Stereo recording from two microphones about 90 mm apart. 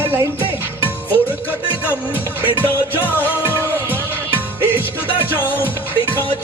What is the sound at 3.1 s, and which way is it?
Music, 20° right (ahead or behind).